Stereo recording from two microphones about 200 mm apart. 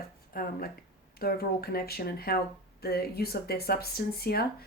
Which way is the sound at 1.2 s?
50° left (ahead or behind).